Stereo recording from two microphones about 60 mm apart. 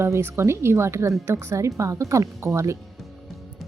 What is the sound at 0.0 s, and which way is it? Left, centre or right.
A woman's voice, right.